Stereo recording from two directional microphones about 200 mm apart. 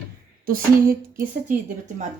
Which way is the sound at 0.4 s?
45° right (ahead or behind).